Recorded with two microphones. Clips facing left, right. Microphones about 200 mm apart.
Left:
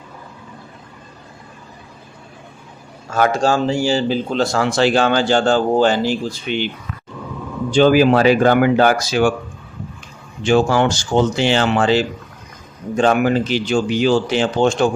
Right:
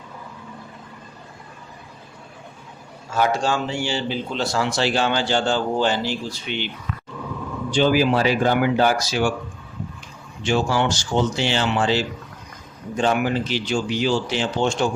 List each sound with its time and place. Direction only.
3.1 s a man's voice: 45° left (ahead or behind)
7.7 s speech: 50° left (ahead or behind)
10.5 s a man's voice: 50° left (ahead or behind)
13.1 s a man's voice: 50° left (ahead or behind)